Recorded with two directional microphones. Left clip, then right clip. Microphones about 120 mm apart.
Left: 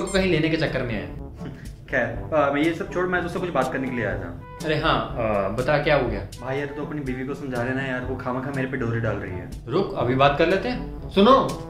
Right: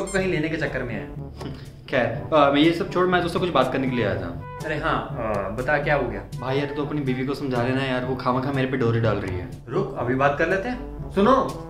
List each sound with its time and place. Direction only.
0.1 s speech: 20° left (ahead or behind)
1.9 s speech: 30° right (ahead or behind)
4.7 s speech: 15° left (ahead or behind)
7.1 s speech: 30° right (ahead or behind)
9.7 s speech: 20° left (ahead or behind)